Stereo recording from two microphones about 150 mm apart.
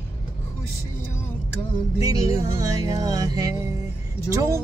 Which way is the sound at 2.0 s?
25° right (ahead or behind).